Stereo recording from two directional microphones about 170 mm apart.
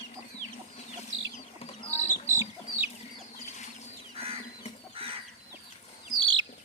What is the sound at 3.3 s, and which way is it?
Chicken, 45° left (ahead or behind).